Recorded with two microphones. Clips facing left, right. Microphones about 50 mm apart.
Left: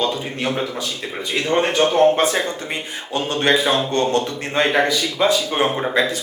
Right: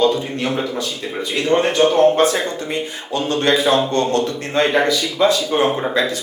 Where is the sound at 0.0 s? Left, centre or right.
Centre.